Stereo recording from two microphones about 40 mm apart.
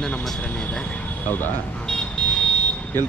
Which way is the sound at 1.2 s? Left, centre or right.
Left.